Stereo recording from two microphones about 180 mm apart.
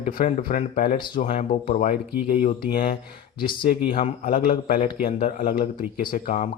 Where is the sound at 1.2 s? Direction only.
45° left (ahead or behind).